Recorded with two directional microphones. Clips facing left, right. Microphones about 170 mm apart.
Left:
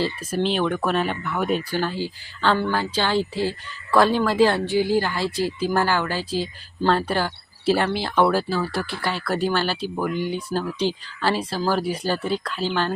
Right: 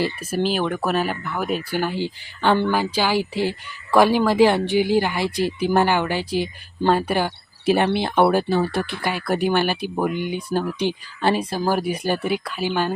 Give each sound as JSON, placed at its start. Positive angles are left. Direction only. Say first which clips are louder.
{"t": 0.0, "sound": "a woman's voice", "louder": "right 1 dB", "side_deg": -10}